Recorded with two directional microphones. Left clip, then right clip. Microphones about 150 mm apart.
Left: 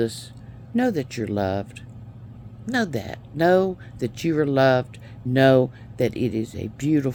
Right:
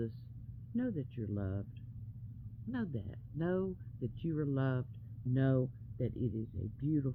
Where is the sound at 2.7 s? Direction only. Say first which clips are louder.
Left 19 dB; 10° left (ahead or behind).